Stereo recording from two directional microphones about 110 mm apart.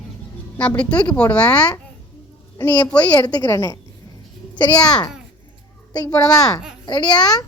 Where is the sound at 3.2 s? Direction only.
40° left (ahead or behind).